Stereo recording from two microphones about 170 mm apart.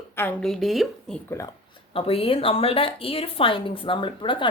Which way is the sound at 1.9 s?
35° left (ahead or behind).